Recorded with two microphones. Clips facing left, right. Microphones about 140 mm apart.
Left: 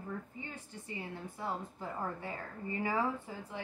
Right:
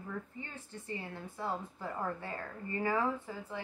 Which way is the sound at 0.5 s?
15° left (ahead or behind).